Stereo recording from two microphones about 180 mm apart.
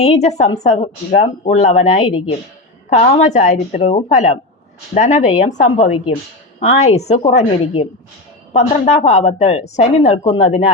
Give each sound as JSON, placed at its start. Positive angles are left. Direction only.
{"t": 0.0, "sound": "a woman's voice", "side_deg": 40}